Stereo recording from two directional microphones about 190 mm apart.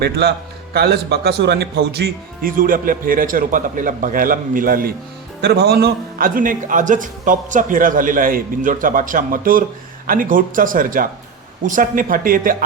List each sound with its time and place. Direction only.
0.0 s a man's voice: 60° right (ahead or behind)